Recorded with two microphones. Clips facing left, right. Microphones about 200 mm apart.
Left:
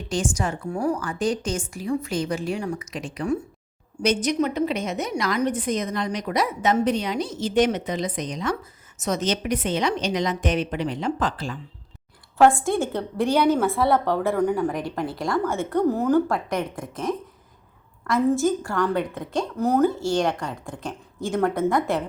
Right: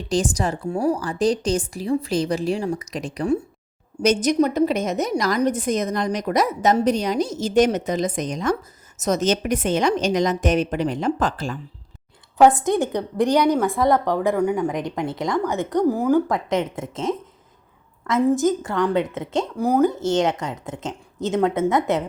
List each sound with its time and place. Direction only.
0.1 s a woman's voice: 35° right (ahead or behind)
12.4 s a woman's voice: 20° right (ahead or behind)
18.3 s a woman's voice: 20° right (ahead or behind)
19.5 s a woman's voice: 10° right (ahead or behind)